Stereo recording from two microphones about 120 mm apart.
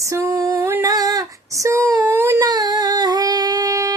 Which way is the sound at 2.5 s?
35° right (ahead or behind).